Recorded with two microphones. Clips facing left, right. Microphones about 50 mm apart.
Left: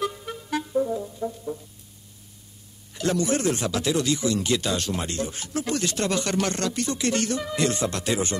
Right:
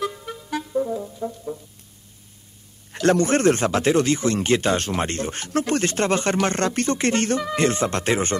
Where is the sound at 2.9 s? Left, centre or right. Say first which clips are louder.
Right 6 dB; right.